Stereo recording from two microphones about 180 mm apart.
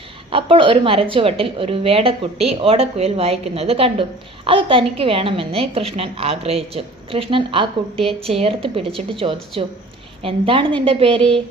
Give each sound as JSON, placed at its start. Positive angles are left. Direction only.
{"t": 0.3, "sound": "a woman's voice", "side_deg": -30}